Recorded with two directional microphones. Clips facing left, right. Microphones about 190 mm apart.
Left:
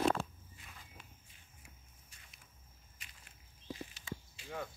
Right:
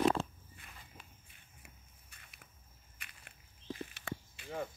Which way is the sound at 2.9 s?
60° right (ahead or behind).